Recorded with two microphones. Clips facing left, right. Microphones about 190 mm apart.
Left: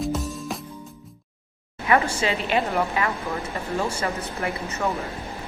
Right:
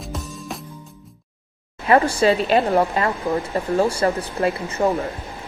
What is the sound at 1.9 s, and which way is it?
A woman's voice, 35° right (ahead or behind).